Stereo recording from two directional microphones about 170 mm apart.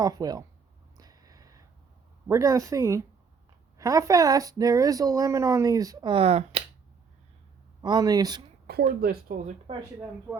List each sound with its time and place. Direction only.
0.0 s speech: 20° right (ahead or behind)
0.9 s a sound: 20° right (ahead or behind)
2.2 s speech: 15° right (ahead or behind); by 6.6 s 35° right (ahead or behind)
7.8 s speech: 25° right (ahead or behind)
8.7 s a woman's voice: 70° right (ahead or behind)
9.3 s speech: 50° right (ahead or behind)